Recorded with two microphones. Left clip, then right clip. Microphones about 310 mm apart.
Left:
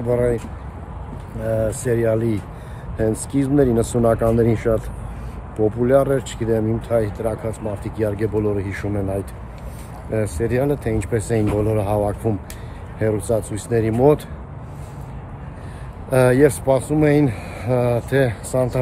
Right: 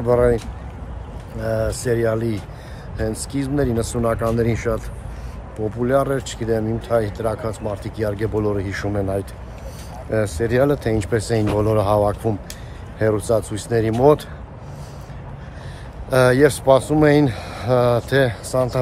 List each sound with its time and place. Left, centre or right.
0.1 s speech: centre
1.5 s speech: centre
16.1 s speech: centre